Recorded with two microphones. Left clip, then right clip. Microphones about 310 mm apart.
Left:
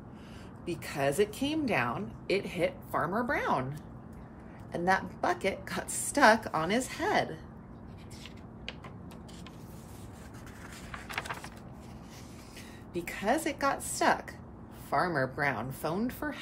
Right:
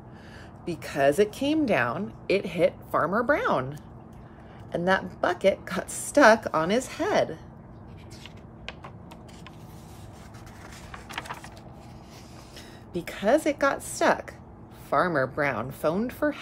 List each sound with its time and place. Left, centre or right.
0.7 s speech: right
4.8 s speech: right
13.0 s speech: right